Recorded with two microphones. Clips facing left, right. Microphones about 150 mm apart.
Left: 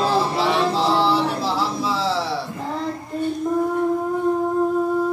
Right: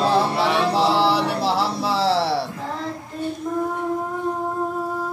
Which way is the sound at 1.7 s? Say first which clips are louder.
Right 2 dB; 65° right (ahead or behind).